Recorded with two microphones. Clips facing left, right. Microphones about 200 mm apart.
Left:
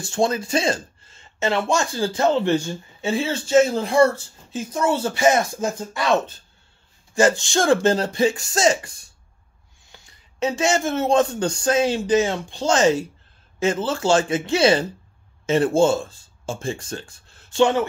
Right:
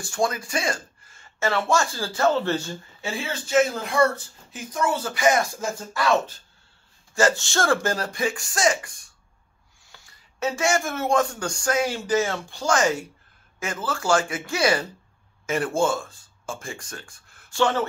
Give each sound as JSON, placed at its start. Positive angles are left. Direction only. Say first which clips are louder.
{"t": 0.0, "sound": "speech", "louder": "left 4 dB", "side_deg": 25}